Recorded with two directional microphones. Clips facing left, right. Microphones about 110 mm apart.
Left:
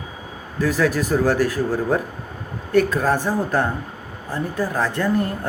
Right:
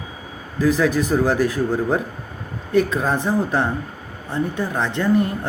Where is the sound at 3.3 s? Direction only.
10° right (ahead or behind).